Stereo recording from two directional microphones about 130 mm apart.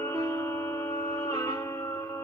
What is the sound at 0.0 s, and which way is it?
Music, 25° left (ahead or behind).